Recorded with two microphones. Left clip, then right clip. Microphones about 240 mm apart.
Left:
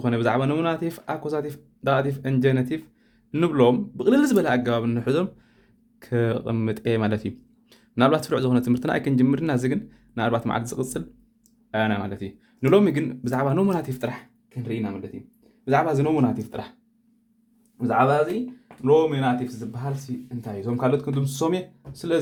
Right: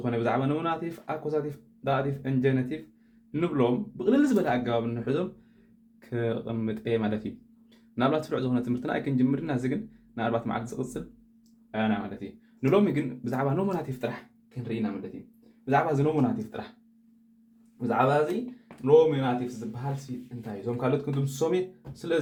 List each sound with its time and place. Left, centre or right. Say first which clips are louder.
0.0 s speech: left 5 dB; left
17.7 s speech: left 4 dB; left
20.4 s speech: left 5 dB; left